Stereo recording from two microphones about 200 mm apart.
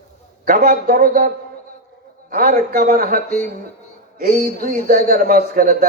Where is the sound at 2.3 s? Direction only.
45° right (ahead or behind).